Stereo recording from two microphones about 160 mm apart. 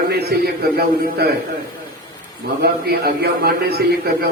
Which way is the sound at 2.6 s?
80° right.